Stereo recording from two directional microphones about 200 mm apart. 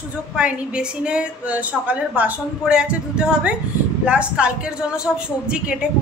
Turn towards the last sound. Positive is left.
turn(degrees=-5)  # may be behind; listen again after turning